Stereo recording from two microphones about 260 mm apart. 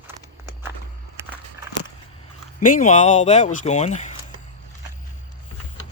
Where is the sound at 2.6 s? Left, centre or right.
Left.